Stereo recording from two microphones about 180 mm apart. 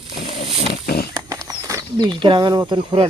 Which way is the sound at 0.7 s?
60° left (ahead or behind).